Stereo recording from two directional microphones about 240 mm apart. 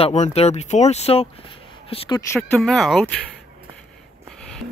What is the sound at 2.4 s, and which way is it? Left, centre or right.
Speech, centre.